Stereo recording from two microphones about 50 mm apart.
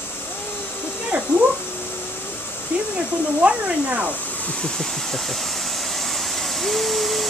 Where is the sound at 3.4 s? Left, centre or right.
Right.